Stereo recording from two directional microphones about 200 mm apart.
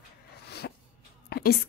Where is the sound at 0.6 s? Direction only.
55° left (ahead or behind).